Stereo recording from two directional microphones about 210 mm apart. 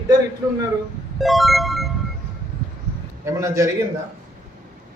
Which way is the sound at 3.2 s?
15° right (ahead or behind).